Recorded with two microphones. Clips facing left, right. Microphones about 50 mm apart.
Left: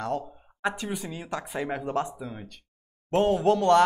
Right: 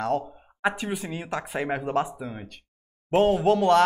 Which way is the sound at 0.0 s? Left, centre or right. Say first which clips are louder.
Right 4 dB; right.